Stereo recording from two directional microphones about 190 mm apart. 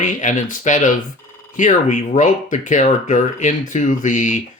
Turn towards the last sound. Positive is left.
turn(degrees=40)  # may be behind; listen again after turning